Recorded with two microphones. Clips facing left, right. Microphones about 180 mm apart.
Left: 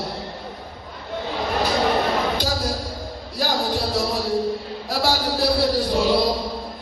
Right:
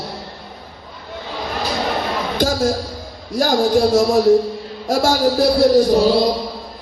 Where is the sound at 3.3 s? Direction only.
45° right (ahead or behind).